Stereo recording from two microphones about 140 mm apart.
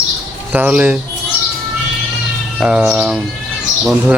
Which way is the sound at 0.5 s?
10° right (ahead or behind).